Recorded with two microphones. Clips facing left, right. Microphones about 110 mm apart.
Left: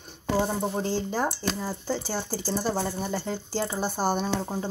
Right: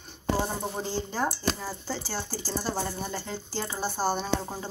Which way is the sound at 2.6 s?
10° left (ahead or behind).